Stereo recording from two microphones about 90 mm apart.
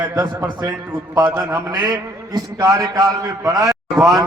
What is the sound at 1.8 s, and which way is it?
A man's voice, 45° right (ahead or behind).